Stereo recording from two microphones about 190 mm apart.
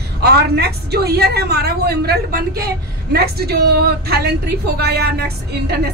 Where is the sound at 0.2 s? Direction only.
55° right (ahead or behind).